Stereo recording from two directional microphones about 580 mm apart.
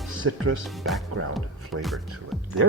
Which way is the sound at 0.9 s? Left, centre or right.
Centre.